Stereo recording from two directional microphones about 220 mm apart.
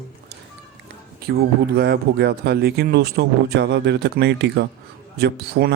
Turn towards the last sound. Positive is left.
turn(degrees=-45)  # may be behind; listen again after turning